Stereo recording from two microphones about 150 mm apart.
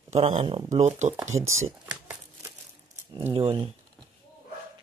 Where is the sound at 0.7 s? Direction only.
50° right (ahead or behind).